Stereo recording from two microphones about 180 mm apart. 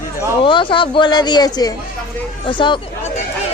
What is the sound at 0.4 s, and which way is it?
A woman's voice, 25° left (ahead or behind).